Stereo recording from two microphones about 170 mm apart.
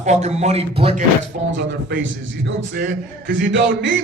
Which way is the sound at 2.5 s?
85° right.